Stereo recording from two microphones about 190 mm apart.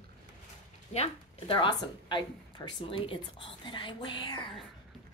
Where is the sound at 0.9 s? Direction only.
30° left (ahead or behind).